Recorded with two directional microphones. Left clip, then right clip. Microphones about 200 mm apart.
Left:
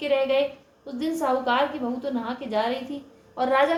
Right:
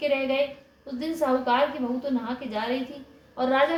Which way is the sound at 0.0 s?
40° left (ahead or behind).